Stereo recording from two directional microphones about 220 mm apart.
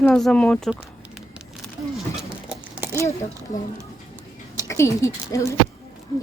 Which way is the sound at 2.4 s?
10° right (ahead or behind).